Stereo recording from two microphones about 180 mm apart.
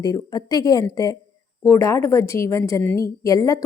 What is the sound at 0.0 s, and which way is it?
A woman's voice, 20° left (ahead or behind).